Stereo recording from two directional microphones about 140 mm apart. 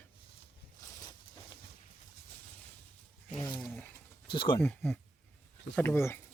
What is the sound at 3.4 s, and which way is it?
Wild animals, 35° left (ahead or behind).